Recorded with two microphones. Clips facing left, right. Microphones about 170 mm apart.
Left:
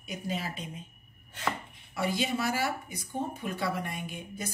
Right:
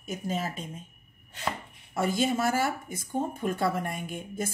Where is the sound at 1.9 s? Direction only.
50° right (ahead or behind).